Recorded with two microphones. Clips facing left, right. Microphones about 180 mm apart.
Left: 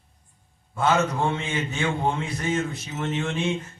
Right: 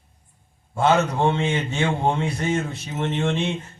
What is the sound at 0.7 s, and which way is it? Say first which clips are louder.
A man's voice: right 3 dB; 30° right (ahead or behind).